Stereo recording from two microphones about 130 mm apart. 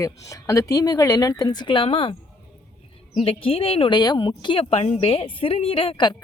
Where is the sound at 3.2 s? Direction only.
45° left (ahead or behind).